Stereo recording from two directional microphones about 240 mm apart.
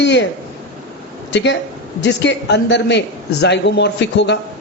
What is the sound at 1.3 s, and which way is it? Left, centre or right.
Speech, left.